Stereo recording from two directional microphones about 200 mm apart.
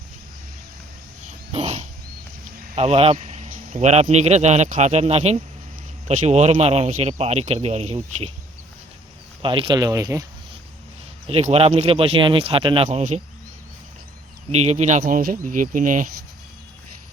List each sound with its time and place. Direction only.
1.5 s wild animals: 30° right (ahead or behind)
2.7 s a man's voice: 30° right (ahead or behind)
9.4 s speech: 25° right (ahead or behind)
11.3 s speech: 30° right (ahead or behind)
14.5 s a man's voice: 35° right (ahead or behind)